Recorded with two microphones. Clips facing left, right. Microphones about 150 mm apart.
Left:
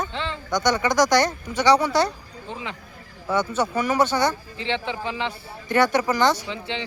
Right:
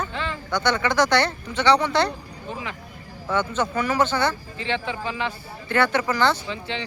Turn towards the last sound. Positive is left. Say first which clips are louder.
# even
turn(degrees=20)  # may be behind; listen again after turning